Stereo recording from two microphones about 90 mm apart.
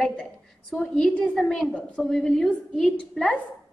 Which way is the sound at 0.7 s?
5° left (ahead or behind).